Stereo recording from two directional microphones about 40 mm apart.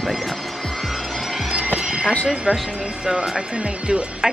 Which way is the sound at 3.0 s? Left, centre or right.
Centre.